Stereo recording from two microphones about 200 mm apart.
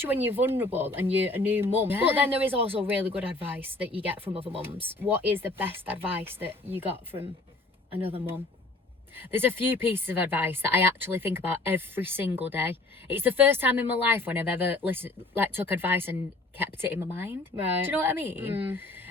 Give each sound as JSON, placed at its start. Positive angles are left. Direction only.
{"t": 0.0, "sound": "speech", "side_deg": -10}
{"t": 4.4, "sound": "speech", "side_deg": -25}
{"t": 4.9, "sound": "speech", "side_deg": -10}
{"t": 9.1, "sound": "speech", "side_deg": -10}